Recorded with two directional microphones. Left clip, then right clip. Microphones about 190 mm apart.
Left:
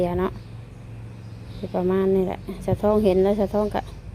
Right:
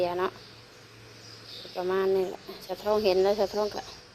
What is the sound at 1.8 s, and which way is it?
A woman's voice, 15° left (ahead or behind).